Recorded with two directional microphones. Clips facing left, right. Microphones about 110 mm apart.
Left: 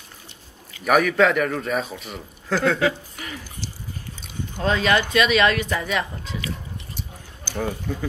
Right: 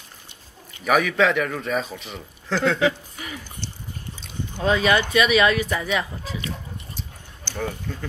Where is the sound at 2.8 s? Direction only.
Centre (ahead or behind).